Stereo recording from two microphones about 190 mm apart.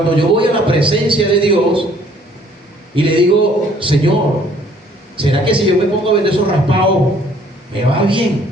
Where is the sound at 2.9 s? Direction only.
25° right (ahead or behind).